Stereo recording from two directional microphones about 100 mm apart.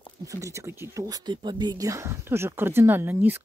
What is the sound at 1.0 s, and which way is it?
Speech, 45° right (ahead or behind).